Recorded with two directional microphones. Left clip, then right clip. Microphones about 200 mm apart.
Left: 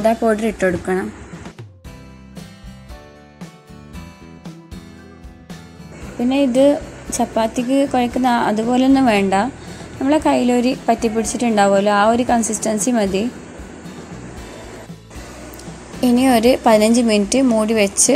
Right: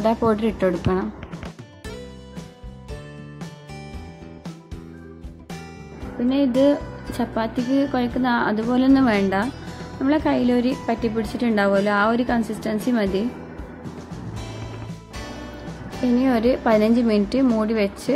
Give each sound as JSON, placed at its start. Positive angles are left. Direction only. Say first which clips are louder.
{"t": 0.0, "sound": "a woman's voice", "louder": "left 4 dB", "side_deg": 10}
{"t": 6.2, "sound": "a woman's voice", "louder": "left 5 dB", "side_deg": 10}
{"t": 16.2, "sound": "a woman's voice", "louder": "left 6 dB", "side_deg": 20}